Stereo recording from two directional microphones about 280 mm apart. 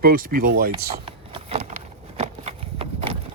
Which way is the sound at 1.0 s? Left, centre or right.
Centre.